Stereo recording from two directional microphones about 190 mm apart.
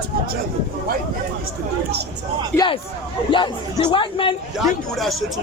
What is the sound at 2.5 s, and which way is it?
A man's voice, 20° left (ahead or behind).